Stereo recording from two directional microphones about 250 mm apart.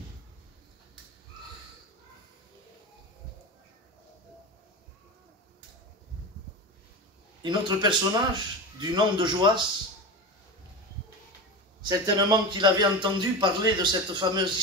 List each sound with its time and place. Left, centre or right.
7.4 s a man's voice: centre
11.8 s a man's voice: centre